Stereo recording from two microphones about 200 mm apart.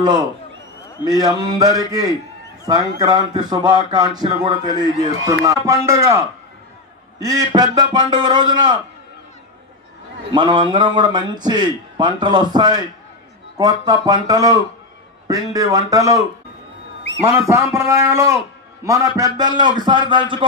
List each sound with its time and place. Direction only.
0.0 s a man's voice: 20° right (ahead or behind)
10.3 s a man's voice: 25° right (ahead or behind)
17.5 s a man's voice: 15° right (ahead or behind)